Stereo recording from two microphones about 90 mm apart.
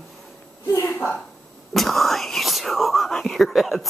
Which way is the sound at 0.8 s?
20° left (ahead or behind).